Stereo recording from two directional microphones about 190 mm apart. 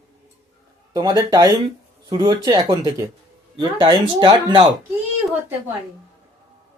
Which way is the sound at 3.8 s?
25° right (ahead or behind).